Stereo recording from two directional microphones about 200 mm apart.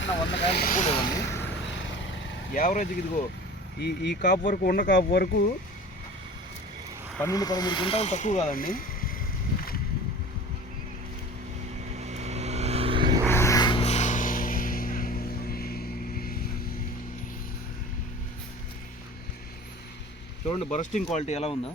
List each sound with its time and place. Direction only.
0.0 s speech: 60° left (ahead or behind)
0.5 s speech: 45° left (ahead or behind); by 1.5 s 15° left (ahead or behind)
2.5 s speech: 40° left (ahead or behind)
3.8 s speech: 55° left (ahead or behind)
4.2 s speech: 40° left (ahead or behind)
7.2 s speech: 15° left (ahead or behind); by 9.1 s 45° left (ahead or behind)
11.9 s vehicle: 35° right (ahead or behind)
13.2 s a sound: 15° left (ahead or behind); by 16.4 s 45° left (ahead or behind)
20.5 s speech: 35° left (ahead or behind)